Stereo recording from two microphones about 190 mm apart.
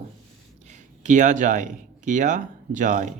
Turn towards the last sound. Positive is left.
turn(degrees=-40)  # may be behind; listen again after turning